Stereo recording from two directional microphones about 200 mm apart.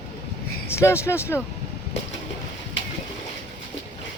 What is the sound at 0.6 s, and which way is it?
Speech, 15° left (ahead or behind).